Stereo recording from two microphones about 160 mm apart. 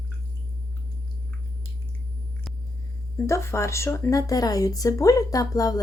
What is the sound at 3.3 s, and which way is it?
A woman's voice, 15° left (ahead or behind).